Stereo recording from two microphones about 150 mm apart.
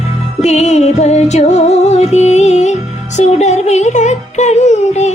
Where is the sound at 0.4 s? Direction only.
50° left (ahead or behind).